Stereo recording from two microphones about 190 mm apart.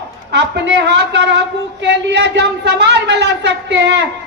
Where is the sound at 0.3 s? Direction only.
65° right (ahead or behind).